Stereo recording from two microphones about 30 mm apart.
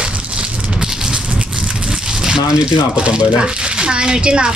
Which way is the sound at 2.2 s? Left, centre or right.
Right.